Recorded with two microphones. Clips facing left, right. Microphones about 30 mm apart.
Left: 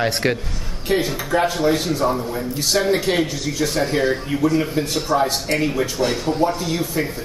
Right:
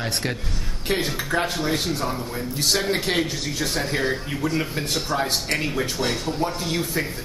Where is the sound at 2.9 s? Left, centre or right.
Right.